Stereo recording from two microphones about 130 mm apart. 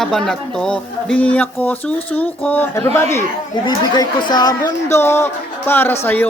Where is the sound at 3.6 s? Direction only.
35° left (ahead or behind).